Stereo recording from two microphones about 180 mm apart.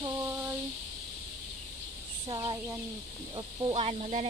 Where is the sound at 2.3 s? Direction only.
25° right (ahead or behind).